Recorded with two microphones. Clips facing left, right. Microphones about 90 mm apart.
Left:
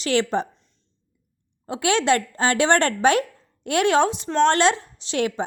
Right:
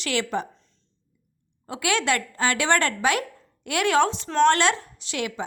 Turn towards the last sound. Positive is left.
turn(degrees=30)  # may be behind; listen again after turning